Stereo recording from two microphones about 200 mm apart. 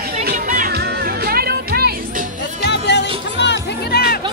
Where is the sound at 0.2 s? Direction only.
45° right (ahead or behind).